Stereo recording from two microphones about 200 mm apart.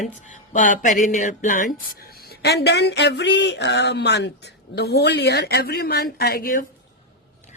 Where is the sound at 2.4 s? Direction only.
55° left (ahead or behind).